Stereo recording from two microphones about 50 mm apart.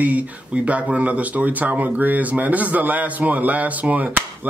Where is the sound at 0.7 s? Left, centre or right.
Right.